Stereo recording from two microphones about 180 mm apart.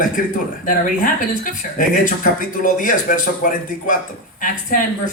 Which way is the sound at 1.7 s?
50° left (ahead or behind).